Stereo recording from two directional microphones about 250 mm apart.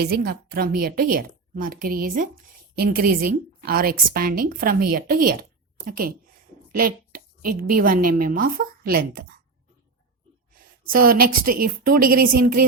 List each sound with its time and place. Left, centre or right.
0.0 s a woman's voice: right
6.7 s a sound: right
8.2 s a woman's voice: right
10.8 s a woman's voice: right